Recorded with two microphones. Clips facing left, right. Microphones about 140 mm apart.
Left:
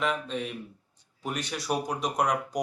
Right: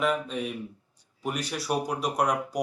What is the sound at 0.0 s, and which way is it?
Speech, 5° right (ahead or behind).